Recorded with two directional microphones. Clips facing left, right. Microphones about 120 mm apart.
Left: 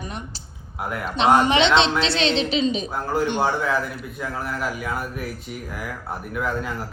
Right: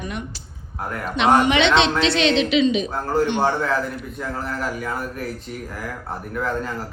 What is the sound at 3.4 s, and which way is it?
Speech, 5° left (ahead or behind).